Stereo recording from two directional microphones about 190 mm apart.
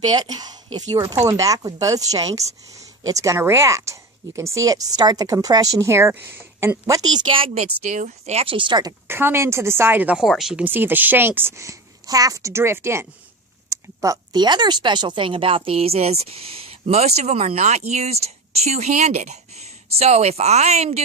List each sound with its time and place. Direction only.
0.0 s speech: 20° right (ahead or behind)